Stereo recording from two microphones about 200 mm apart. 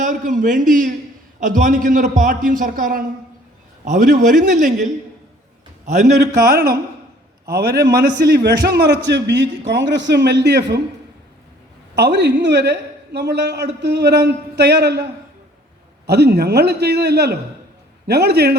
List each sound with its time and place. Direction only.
0.0 s a man's voice: 40° right (ahead or behind)
6.1 s a man's voice: 50° right (ahead or behind)
11.9 s a woman's voice: 60° right (ahead or behind)
16.0 s a woman's voice: 55° right (ahead or behind)